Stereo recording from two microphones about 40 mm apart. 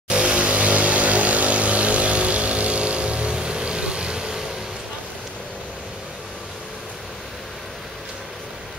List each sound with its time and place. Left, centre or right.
0.1 s vehicle: right